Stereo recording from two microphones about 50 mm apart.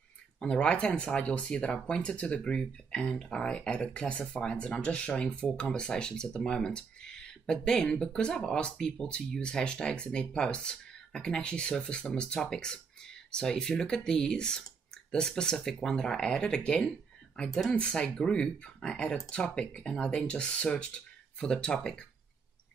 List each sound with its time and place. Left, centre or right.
0.4 s speech: centre